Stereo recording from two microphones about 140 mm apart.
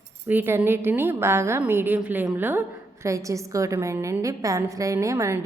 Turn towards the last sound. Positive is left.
turn(degrees=-20)  # may be behind; listen again after turning